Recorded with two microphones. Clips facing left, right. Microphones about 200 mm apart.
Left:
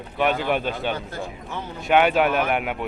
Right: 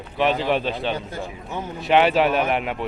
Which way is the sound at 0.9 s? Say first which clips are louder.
Right 1 dB; 15° right (ahead or behind).